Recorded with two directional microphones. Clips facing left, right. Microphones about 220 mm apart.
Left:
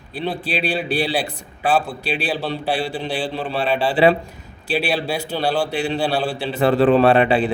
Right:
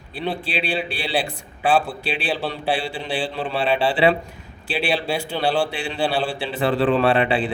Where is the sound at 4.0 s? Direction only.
45° left (ahead or behind).